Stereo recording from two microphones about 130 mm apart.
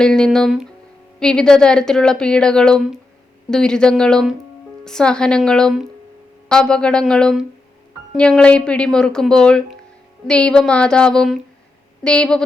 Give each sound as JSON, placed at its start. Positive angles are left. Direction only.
{"t": 0.0, "sound": "a woman's voice", "side_deg": 5}